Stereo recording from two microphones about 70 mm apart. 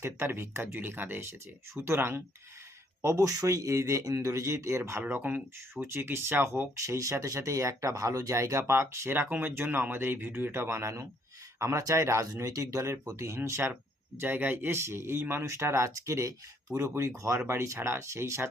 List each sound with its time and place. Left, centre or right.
0.0 s speech: right
3.0 s speech: right
14.2 s speech: right